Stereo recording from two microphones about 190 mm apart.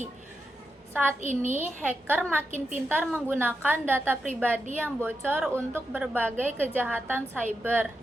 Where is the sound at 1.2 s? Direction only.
40° right (ahead or behind).